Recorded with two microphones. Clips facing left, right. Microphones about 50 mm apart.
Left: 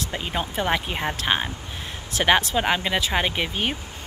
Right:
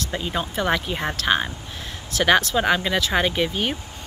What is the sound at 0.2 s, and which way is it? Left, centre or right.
Speech, centre.